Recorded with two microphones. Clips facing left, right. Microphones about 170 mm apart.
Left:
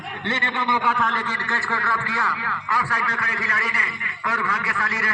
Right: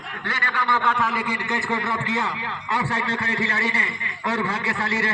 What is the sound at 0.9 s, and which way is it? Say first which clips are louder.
A man's voice: even; 5° right (ahead or behind).